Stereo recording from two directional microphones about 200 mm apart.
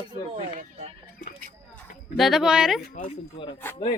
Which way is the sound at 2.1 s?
Centre (ahead or behind).